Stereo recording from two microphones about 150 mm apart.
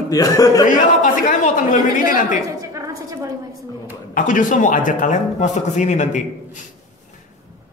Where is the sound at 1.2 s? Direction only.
60° left (ahead or behind).